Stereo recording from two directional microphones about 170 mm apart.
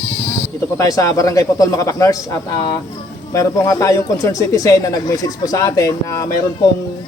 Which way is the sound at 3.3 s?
20° left (ahead or behind).